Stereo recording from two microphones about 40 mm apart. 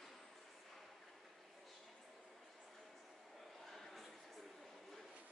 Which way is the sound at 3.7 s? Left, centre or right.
Centre.